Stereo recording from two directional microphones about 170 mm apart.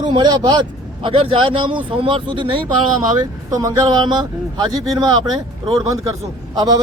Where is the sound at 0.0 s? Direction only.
25° right (ahead or behind).